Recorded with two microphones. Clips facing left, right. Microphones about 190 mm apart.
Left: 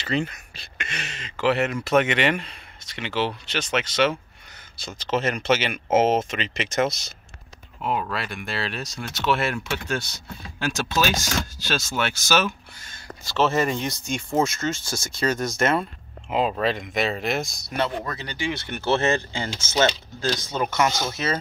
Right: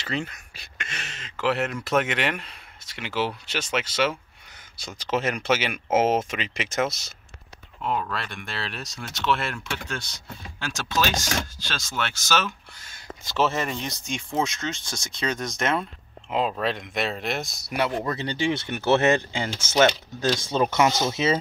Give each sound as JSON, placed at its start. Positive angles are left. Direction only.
{"t": 0.0, "sound": "speech", "side_deg": 0}
{"t": 7.8, "sound": "speech", "side_deg": 10}
{"t": 17.7, "sound": "speech", "side_deg": -10}
{"t": 18.0, "sound": "speech", "side_deg": -25}